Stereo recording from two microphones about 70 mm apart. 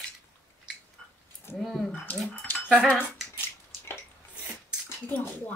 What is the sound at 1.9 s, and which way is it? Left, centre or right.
Speech, left.